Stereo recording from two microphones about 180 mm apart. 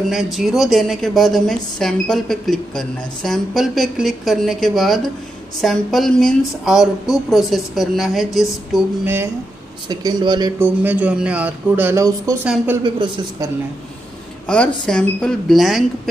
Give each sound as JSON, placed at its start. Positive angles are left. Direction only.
{"t": 0.1, "sound": "a woman's voice", "side_deg": 0}
{"t": 9.0, "sound": "speech", "side_deg": -15}
{"t": 9.8, "sound": "speech", "side_deg": -25}
{"t": 10.6, "sound": "speech", "side_deg": -10}
{"t": 14.5, "sound": "a woman's voice", "side_deg": 5}